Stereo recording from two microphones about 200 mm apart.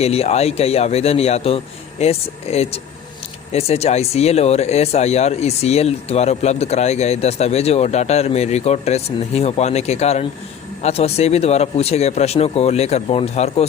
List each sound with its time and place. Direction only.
0.0 s speech: 30° left (ahead or behind)